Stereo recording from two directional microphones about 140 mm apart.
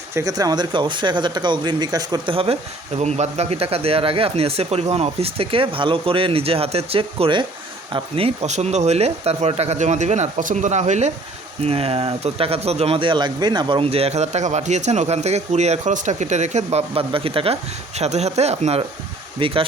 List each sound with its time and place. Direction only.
0.1 s speech: 25° right (ahead or behind); by 11.1 s 55° right (ahead or behind)
11.6 s speech: 45° right (ahead or behind)
16.7 s speech: 40° right (ahead or behind)